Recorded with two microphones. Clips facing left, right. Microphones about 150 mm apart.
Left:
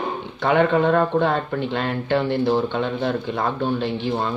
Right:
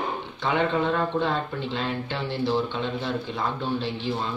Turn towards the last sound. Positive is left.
turn(degrees=55)  # may be behind; listen again after turning